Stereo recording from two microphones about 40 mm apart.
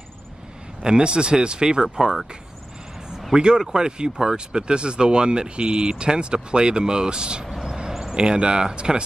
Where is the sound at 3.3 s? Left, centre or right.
Centre.